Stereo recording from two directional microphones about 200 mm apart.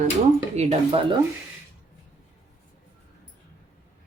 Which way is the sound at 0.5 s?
35° right (ahead or behind).